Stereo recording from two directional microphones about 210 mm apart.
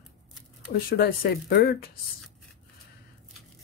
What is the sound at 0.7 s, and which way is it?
Speech, 45° left (ahead or behind).